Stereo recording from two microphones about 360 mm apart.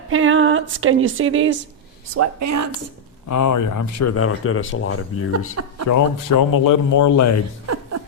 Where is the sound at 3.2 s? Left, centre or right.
Left.